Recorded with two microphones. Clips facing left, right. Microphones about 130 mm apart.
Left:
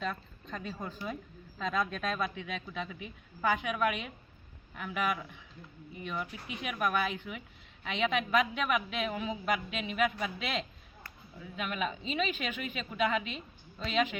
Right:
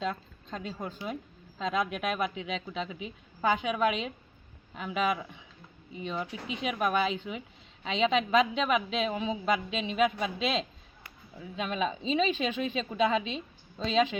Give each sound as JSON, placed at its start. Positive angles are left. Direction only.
{"t": 0.0, "sound": "a woman's voice", "side_deg": -20}